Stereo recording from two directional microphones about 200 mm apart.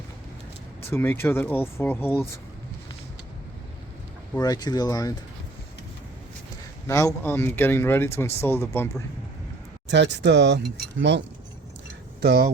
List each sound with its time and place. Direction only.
0.9 s a man's voice: 10° left (ahead or behind)
4.4 s speech: 20° left (ahead or behind)
6.8 s a man's voice: 15° left (ahead or behind)
9.9 s speech: 60° right (ahead or behind)
12.2 s speech: 50° right (ahead or behind)